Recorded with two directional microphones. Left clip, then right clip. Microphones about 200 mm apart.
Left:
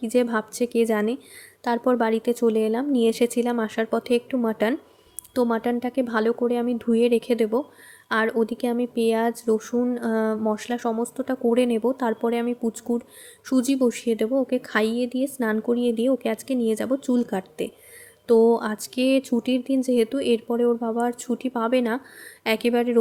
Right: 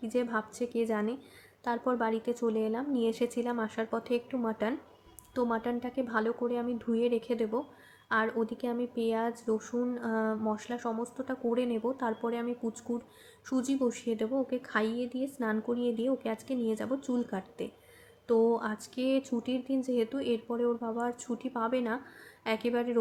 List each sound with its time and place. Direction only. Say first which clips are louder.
0.0 s speech: left 9 dB; 40° left (ahead or behind)